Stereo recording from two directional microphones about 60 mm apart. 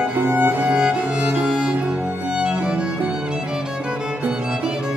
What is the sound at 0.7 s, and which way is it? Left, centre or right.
Music, centre.